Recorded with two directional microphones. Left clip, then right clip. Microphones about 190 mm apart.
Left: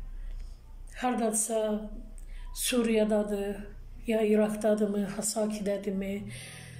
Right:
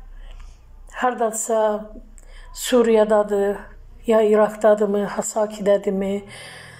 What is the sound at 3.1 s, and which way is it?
Speech, 40° right (ahead or behind).